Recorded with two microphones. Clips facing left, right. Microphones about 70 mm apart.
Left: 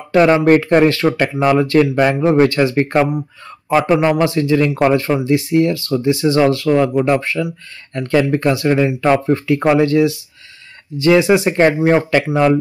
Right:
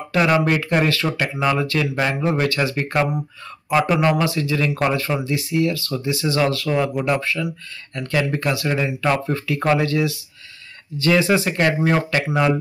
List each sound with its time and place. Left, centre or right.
0.1 s speech: left